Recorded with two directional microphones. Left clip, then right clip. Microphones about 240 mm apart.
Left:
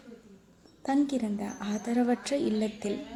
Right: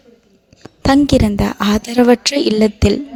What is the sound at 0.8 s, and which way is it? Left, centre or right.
A woman's voice, right.